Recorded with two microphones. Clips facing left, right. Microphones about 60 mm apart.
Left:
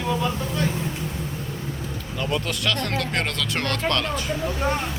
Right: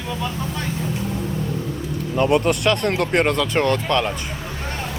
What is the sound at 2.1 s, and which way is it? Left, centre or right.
Speech, right.